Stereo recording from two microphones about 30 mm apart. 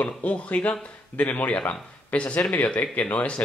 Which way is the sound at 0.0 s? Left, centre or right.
Left.